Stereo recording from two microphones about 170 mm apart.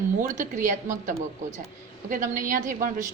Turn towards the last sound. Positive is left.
turn(degrees=-50)  # may be behind; listen again after turning